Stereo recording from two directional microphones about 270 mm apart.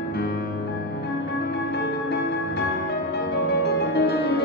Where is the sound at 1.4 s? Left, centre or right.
Left.